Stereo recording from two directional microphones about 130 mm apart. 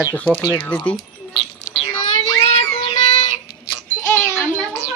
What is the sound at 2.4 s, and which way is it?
Music, 50° left (ahead or behind).